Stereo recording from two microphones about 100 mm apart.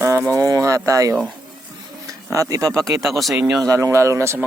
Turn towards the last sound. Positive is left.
turn(degrees=-30)  # may be behind; listen again after turning